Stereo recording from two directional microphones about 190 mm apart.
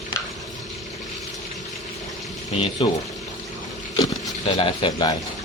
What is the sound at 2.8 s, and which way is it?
Speech, 30° left (ahead or behind).